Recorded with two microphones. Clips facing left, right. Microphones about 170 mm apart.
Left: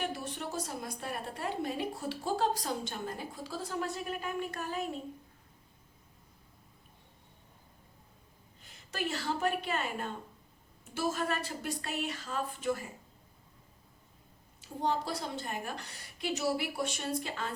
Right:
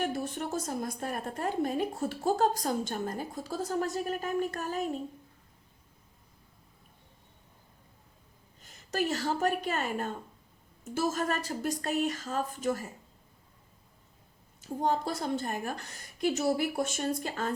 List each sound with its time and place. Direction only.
0.0 s a woman's voice: 45° right (ahead or behind)
8.6 s a woman's voice: 45° right (ahead or behind)
14.6 s a woman's voice: 45° right (ahead or behind)